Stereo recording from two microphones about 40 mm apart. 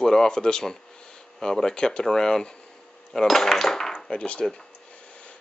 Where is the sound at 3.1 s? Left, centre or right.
Centre.